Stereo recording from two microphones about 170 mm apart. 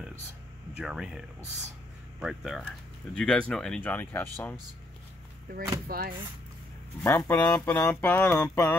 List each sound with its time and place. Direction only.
0.7 s speech: 5° right (ahead or behind)
5.9 s speech: 60° right (ahead or behind)
7.0 s speech: 15° left (ahead or behind)